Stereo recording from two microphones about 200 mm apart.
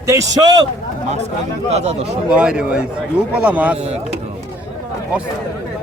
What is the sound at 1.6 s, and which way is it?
Speech, 35° right (ahead or behind).